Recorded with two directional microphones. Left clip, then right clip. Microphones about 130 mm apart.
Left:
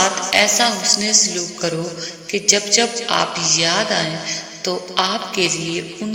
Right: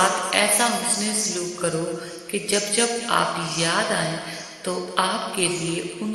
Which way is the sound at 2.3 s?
20° left (ahead or behind).